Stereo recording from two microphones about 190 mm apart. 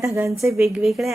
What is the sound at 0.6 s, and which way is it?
Speech, centre (ahead or behind).